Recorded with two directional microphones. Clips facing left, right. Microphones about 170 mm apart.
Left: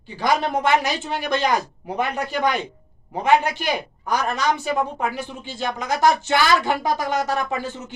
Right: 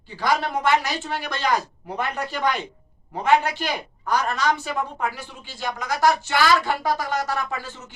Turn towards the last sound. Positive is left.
turn(degrees=20)  # may be behind; listen again after turning